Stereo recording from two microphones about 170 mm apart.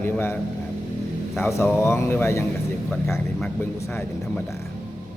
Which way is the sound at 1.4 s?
15° left (ahead or behind).